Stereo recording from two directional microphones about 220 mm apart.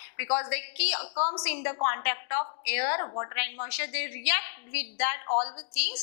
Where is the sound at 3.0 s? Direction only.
25° left (ahead or behind).